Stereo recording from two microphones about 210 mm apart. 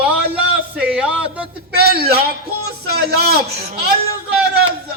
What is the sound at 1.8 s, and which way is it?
A man's voice, 50° right (ahead or behind).